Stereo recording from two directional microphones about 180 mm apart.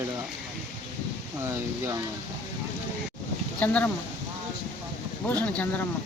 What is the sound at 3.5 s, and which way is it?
Speech, 10° left (ahead or behind).